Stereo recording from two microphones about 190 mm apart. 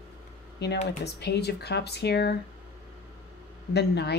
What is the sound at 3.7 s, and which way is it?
Speech, 60° left (ahead or behind).